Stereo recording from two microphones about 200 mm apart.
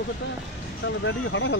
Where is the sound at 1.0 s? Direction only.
65° left (ahead or behind).